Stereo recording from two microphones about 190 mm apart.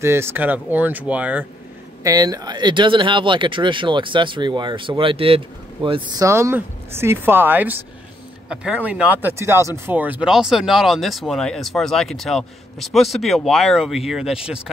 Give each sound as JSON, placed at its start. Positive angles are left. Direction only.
{"t": 0.0, "sound": "speech", "side_deg": -15}
{"t": 2.0, "sound": "speech", "side_deg": -20}